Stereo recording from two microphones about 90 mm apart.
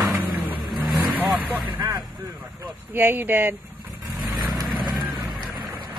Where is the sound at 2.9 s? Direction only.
25° right (ahead or behind).